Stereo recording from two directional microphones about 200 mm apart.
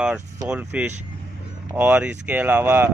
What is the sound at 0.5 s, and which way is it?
Speech, 5° right (ahead or behind).